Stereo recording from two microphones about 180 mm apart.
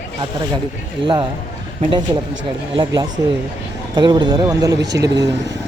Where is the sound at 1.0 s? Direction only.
25° right (ahead or behind).